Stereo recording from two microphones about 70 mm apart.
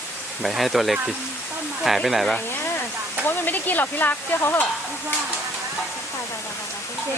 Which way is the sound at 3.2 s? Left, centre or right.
Left.